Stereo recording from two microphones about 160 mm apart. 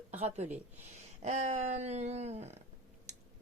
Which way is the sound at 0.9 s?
45° right (ahead or behind).